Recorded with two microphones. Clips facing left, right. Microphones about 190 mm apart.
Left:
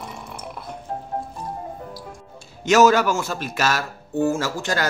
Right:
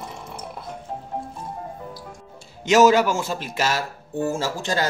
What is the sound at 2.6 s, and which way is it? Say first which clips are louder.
Speech: even; 25° right (ahead or behind).